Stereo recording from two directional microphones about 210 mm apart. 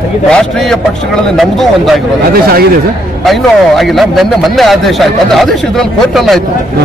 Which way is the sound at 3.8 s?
Centre (ahead or behind).